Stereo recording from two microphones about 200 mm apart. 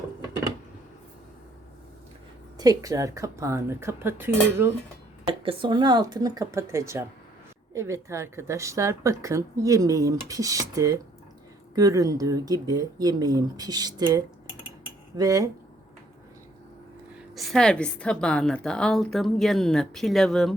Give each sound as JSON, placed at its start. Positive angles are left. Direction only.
{"t": 2.6, "sound": "speech", "side_deg": -20}
{"t": 5.2, "sound": "speech", "side_deg": -25}
{"t": 17.3, "sound": "a woman's voice", "side_deg": 0}